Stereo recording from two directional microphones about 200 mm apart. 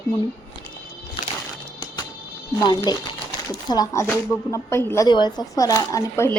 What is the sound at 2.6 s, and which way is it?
Speech, 20° left (ahead or behind).